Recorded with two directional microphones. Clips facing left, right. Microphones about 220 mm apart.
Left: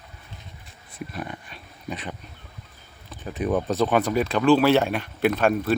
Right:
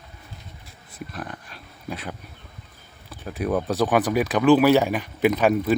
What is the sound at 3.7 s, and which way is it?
A man's voice, 15° right (ahead or behind).